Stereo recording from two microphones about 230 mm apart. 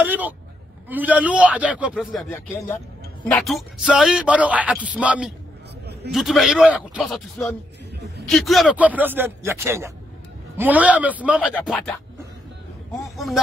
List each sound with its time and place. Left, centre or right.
0.0 s a sound: centre
0.8 s speech: centre
2.3 s speech: centre
3.3 s speech: centre
13.0 s speech: centre